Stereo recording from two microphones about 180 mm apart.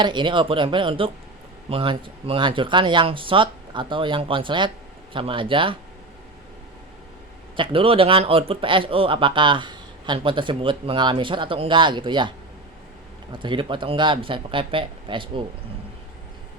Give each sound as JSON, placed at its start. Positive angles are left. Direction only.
{"t": 0.0, "sound": "a man's voice", "side_deg": -25}
{"t": 7.5, "sound": "a man's voice", "side_deg": -30}
{"t": 13.4, "sound": "a man's voice", "side_deg": -25}